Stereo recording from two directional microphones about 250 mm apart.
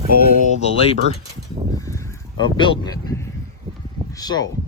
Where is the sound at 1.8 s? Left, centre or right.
Centre.